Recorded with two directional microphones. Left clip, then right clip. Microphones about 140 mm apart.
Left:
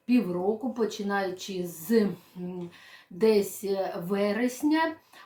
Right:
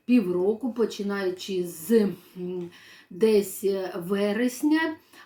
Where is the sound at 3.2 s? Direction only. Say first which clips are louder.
Right 2 dB; 15° left (ahead or behind).